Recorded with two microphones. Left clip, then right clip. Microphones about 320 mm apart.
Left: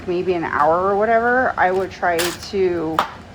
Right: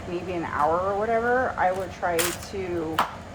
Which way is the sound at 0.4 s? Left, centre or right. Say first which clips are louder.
Left 6 dB; left.